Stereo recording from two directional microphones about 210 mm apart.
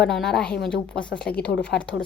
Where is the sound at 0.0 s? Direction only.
Centre (ahead or behind).